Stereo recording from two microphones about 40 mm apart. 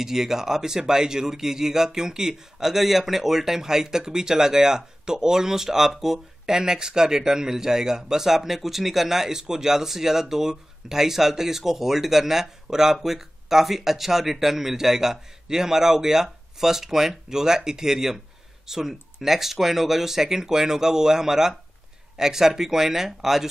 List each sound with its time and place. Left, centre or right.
0.0 s speech: centre